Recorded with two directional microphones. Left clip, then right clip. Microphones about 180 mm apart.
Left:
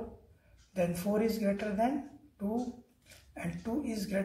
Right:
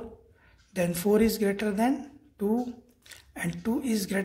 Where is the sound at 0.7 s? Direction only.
45° right (ahead or behind).